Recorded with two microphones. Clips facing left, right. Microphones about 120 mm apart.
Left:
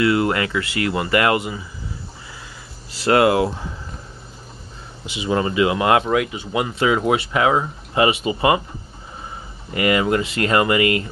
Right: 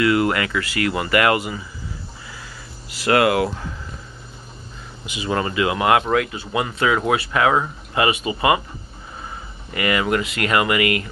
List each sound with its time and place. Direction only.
0.0 s speech: 25° left (ahead or behind)
2.9 s speech: 25° left (ahead or behind)
5.0 s speech: 25° left (ahead or behind)
9.7 s speech: 25° left (ahead or behind)